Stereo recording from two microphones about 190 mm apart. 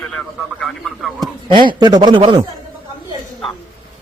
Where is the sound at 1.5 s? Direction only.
25° right (ahead or behind).